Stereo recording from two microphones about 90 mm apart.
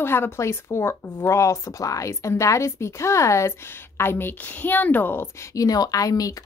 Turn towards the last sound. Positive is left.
turn(degrees=40)  # may be behind; listen again after turning